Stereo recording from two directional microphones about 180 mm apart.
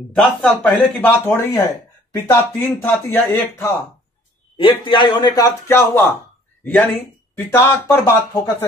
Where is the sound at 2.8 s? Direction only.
10° left (ahead or behind).